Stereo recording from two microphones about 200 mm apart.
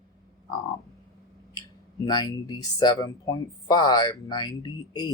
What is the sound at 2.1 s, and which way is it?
Speech, 20° left (ahead or behind).